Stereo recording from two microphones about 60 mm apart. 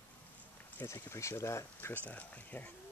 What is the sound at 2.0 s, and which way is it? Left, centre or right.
Speech, left.